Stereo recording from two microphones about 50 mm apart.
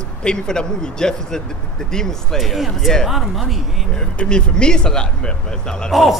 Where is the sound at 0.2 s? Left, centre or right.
Centre.